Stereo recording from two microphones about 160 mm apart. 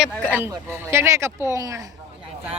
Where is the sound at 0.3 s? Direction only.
15° right (ahead or behind).